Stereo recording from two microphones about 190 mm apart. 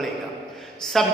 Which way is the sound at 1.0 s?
Centre (ahead or behind).